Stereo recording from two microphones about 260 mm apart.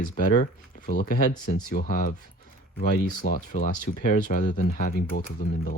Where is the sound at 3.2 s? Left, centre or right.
Left.